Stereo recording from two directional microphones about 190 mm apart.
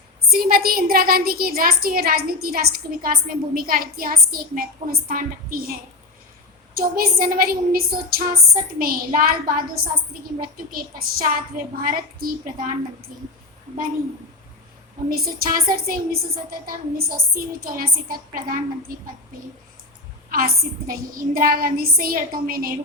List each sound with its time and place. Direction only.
0.3 s a woman's voice: 50° right (ahead or behind)
6.7 s a woman's voice: 50° right (ahead or behind)
15.1 s a woman's voice: 50° right (ahead or behind)
20.3 s a woman's voice: 50° right (ahead or behind)